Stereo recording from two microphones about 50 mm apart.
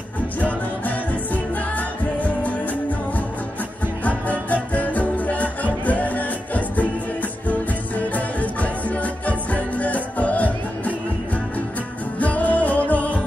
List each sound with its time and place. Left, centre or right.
0.4 s music: left
4.0 s music: left
12.2 s music: left